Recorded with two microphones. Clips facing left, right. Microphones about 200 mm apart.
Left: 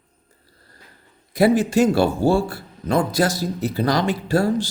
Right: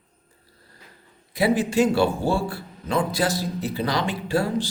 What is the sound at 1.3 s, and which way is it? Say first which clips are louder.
A man's voice: left 4 dB; 45° left (ahead or behind).